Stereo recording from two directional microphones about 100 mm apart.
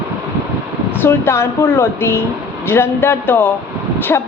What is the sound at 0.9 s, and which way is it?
A woman's voice, 25° left (ahead or behind).